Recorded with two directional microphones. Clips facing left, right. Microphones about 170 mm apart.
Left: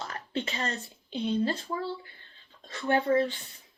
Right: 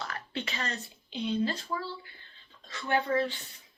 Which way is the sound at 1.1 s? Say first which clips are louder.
Left 2 dB; 40° left (ahead or behind).